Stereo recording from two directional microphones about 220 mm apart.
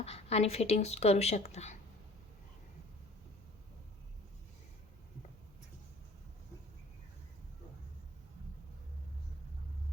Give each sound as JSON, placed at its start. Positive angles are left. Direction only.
{"t": 0.0, "sound": "speech", "side_deg": 30}